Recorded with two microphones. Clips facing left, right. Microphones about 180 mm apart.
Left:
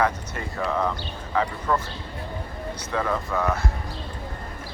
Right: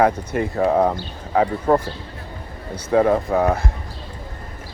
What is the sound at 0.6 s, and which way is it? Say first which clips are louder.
Speech: right 7 dB; 50° right (ahead or behind).